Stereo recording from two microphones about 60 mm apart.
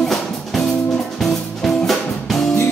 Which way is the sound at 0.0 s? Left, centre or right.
Centre.